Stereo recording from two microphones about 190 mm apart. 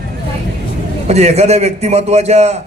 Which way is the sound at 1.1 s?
35° right (ahead or behind).